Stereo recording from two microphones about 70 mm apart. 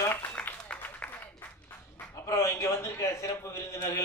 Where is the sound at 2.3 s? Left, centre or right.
Left.